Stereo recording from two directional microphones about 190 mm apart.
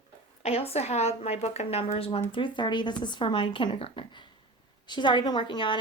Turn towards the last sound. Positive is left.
turn(degrees=25)  # may be behind; listen again after turning